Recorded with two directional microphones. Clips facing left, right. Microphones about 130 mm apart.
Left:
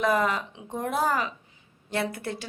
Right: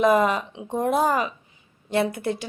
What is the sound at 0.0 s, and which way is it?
A woman's voice, 20° right (ahead or behind).